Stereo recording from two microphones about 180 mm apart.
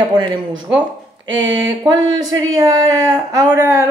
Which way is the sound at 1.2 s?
90° right.